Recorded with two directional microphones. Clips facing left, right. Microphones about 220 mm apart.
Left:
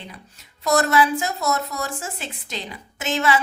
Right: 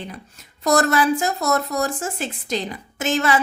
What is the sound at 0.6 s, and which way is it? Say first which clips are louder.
A woman's voice: right 1 dB; 50° right (ahead or behind).